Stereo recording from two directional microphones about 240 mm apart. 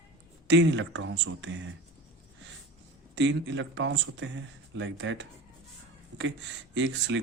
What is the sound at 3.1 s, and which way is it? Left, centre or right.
Speech, right.